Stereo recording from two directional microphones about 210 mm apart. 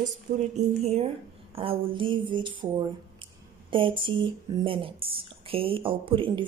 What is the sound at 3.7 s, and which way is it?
Speech, 25° right (ahead or behind).